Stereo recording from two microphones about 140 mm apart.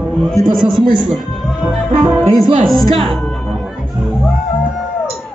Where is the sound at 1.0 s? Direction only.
5° right (ahead or behind).